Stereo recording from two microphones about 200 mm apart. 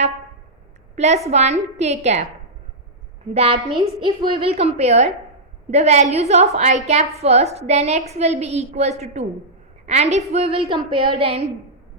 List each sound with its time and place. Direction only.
0.9 s a woman's voice: 35° right (ahead or behind)
3.3 s a woman's voice: 30° right (ahead or behind)